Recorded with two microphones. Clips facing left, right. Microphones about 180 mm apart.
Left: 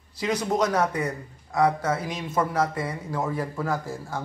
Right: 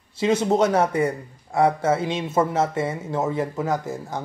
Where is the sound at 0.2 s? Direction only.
25° right (ahead or behind).